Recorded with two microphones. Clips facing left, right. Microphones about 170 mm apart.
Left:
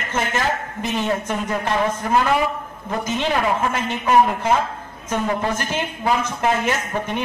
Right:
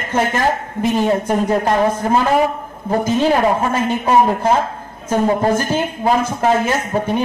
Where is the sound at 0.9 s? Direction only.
40° right (ahead or behind).